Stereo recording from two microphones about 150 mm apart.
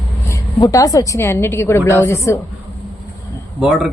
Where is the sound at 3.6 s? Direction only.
Centre (ahead or behind).